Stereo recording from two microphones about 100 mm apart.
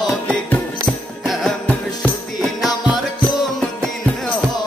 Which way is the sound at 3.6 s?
10° left (ahead or behind).